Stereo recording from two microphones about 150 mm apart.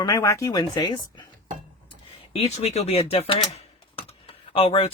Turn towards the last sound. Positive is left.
turn(degrees=40)  # may be behind; listen again after turning